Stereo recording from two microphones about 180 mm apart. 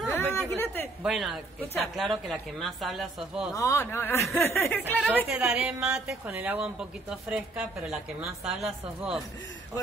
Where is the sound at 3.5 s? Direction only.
15° left (ahead or behind).